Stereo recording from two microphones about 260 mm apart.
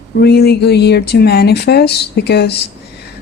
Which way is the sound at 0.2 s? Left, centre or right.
Left.